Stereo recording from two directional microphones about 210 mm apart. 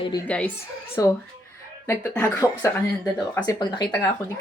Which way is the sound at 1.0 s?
15° left (ahead or behind).